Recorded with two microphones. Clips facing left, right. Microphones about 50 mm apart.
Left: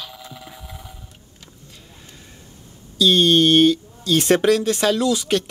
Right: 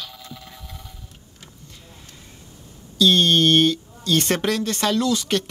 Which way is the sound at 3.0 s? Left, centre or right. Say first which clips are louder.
Left 2 dB; centre.